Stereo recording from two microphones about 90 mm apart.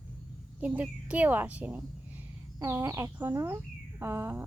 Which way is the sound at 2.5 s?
35° right (ahead or behind).